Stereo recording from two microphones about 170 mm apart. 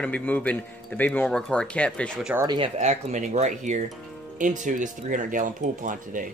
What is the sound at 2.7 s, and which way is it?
Speech, 45° right (ahead or behind).